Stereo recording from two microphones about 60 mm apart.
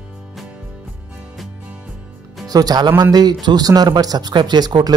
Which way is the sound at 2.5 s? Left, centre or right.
Right.